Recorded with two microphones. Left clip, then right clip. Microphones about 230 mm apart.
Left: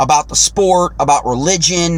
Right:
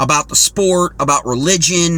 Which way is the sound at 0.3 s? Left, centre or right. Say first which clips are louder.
Left 1 dB; left.